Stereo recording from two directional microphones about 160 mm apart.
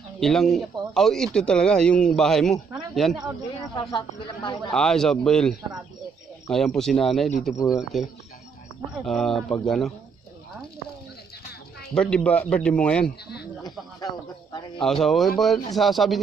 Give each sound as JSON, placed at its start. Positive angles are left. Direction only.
{"t": 0.2, "sound": "speech", "side_deg": 0}
{"t": 3.7, "sound": "speech", "side_deg": 30}
{"t": 4.6, "sound": "speech", "side_deg": 5}
{"t": 11.9, "sound": "speech", "side_deg": 5}
{"t": 14.8, "sound": "speech", "side_deg": 5}